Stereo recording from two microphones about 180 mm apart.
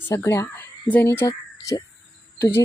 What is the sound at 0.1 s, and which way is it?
Speech, 15° left (ahead or behind).